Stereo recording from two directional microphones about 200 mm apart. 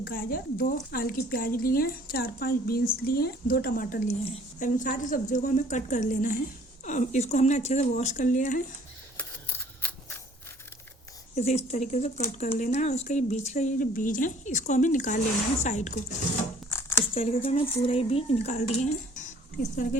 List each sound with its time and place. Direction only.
0.0 s a woman's voice: 45° left (ahead or behind)
9.1 s camera: 10° left (ahead or behind)
11.3 s speech: 35° left (ahead or behind)
16.6 s a sound: 10° left (ahead or behind)
17.2 s speech: 30° left (ahead or behind)